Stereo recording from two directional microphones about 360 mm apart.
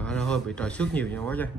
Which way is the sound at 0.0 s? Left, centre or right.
Centre.